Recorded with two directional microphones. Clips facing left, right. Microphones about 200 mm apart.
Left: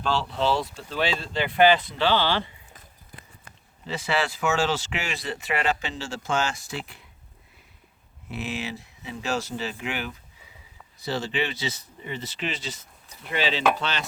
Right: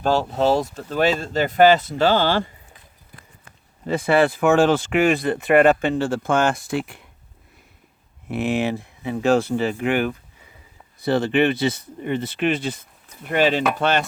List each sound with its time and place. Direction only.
0.0 s speech: 45° right (ahead or behind)
3.8 s speech: 55° right (ahead or behind)
8.3 s speech: 55° right (ahead or behind)